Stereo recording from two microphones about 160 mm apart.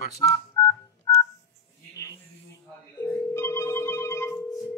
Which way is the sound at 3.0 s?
15° left (ahead or behind).